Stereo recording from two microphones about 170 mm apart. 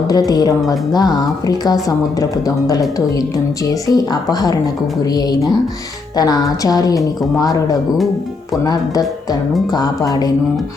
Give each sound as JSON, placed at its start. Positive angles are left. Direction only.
{"t": 0.1, "sound": "a woman's voice", "side_deg": 20}
{"t": 3.8, "sound": "a woman's voice", "side_deg": 25}
{"t": 6.1, "sound": "a woman's voice", "side_deg": 20}